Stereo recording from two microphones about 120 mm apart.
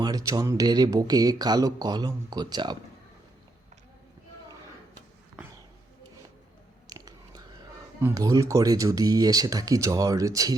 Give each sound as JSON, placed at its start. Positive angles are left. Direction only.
{"t": 0.0, "sound": "speech", "side_deg": -30}
{"t": 6.9, "sound": "biting", "side_deg": -35}
{"t": 8.0, "sound": "speech", "side_deg": -30}